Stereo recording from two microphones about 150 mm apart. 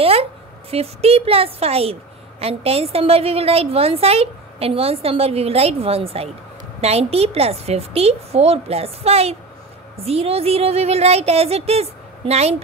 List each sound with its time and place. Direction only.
0.0 s a woman's voice: 40° right (ahead or behind)